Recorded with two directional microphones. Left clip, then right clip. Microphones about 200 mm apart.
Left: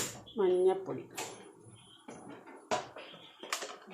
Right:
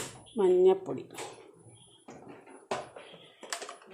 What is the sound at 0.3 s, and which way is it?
Speech, 20° right (ahead or behind).